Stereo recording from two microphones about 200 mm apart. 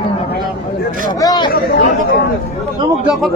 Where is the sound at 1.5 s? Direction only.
55° left (ahead or behind).